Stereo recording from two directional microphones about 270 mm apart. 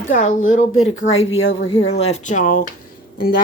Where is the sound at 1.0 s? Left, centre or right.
Left.